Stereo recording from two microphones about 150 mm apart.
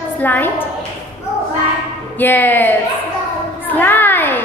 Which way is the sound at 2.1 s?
15° left (ahead or behind).